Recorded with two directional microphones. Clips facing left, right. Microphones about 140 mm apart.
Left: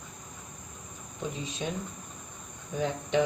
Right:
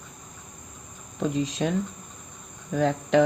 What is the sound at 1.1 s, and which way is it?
Speech, 90° right.